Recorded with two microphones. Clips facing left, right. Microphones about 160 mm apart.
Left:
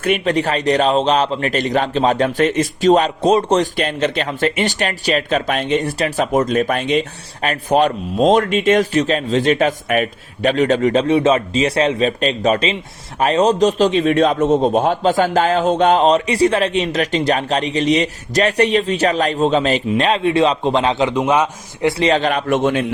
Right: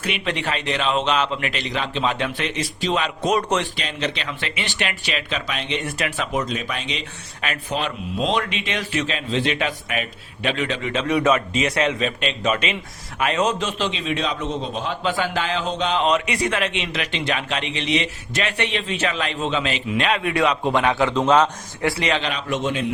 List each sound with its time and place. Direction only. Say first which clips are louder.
0.0 s a man's voice: left 9 dB; 45° left (ahead or behind)
3.8 s a man's voice: left 8 dB; 50° left (ahead or behind)
5.8 s a man's voice: left 7 dB; 35° left (ahead or behind); by 16.0 s 50° left (ahead or behind)
16.0 s a man's voice: left 7 dB; 30° left (ahead or behind); by 21.8 s 10° left (ahead or behind)
21.8 s a man's voice: left 7 dB; 30° left (ahead or behind)
22.2 s a man's voice: left 8 dB; 50° left (ahead or behind)